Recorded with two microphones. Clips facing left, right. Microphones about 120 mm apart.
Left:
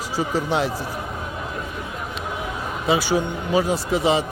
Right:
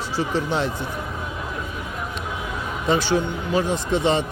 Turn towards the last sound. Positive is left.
turn(degrees=5)  # may be behind; listen again after turning